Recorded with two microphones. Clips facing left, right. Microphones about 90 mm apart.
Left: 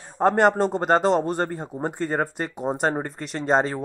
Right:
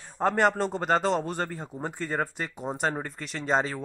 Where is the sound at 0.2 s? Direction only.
40° left (ahead or behind).